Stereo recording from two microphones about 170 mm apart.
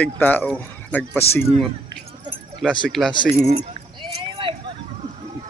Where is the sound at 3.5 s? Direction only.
30° right (ahead or behind).